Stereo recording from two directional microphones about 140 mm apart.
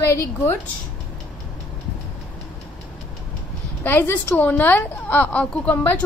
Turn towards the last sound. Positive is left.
turn(degrees=15)  # may be behind; listen again after turning